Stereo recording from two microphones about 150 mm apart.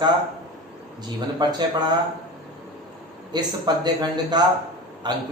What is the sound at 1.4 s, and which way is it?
Speech, 30° right (ahead or behind).